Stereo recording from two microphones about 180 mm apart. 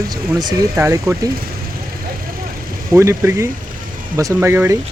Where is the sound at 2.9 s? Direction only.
15° right (ahead or behind).